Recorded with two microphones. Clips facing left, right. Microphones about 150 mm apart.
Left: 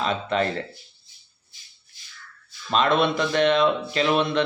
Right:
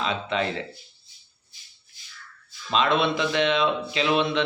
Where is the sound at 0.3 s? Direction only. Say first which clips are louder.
Left 3 dB; 45° left (ahead or behind).